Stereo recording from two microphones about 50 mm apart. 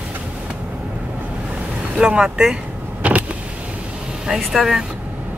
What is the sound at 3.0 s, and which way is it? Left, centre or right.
Vehicle, right.